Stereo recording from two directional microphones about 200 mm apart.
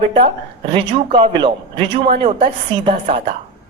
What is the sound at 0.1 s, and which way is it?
A man's voice, 25° right (ahead or behind).